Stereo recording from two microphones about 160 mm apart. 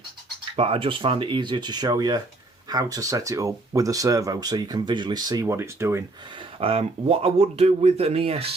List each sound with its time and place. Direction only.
0.5 s speech: 35° right (ahead or behind); by 6.0 s 15° right (ahead or behind)
6.6 s speech: 35° right (ahead or behind)